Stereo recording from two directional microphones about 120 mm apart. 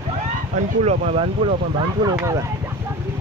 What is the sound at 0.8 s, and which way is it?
Speech, 65° right (ahead or behind).